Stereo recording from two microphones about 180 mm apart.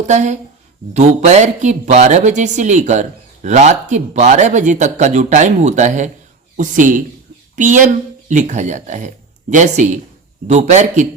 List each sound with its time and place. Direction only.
0.0 s speech: 40° right (ahead or behind)